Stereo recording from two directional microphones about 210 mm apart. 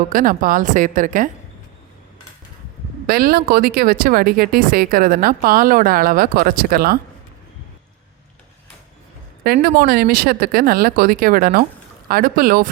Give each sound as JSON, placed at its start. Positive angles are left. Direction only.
{"t": 0.1, "sound": "a woman's voice", "side_deg": -40}
{"t": 3.1, "sound": "speech", "side_deg": -45}
{"t": 9.4, "sound": "speech", "side_deg": -45}